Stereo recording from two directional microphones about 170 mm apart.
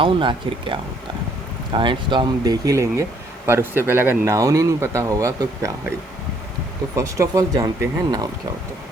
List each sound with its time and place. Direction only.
0.0 s speech: 30° right (ahead or behind)
6.9 s speech: 20° right (ahead or behind)